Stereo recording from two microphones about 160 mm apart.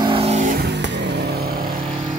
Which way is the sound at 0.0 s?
35° right (ahead or behind).